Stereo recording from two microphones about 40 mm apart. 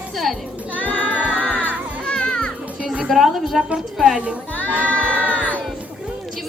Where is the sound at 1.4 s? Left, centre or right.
Left.